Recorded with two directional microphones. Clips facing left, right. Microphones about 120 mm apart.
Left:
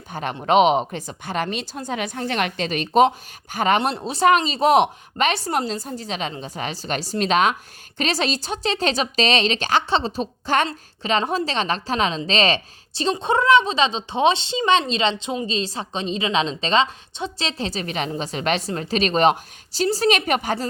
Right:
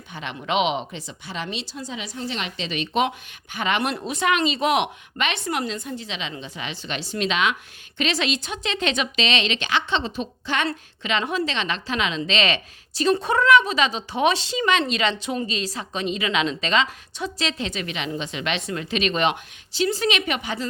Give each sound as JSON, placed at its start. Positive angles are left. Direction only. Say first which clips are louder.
{"t": 0.1, "sound": "a woman's voice", "louder": "left 7 dB", "side_deg": 45}
{"t": 3.8, "sound": "a woman's voice", "louder": "left 3 dB", "side_deg": 30}